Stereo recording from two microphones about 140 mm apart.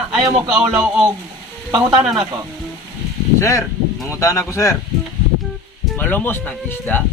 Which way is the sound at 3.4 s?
20° left (ahead or behind).